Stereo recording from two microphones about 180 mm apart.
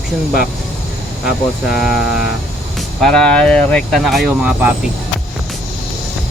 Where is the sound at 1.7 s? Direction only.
5° right (ahead or behind).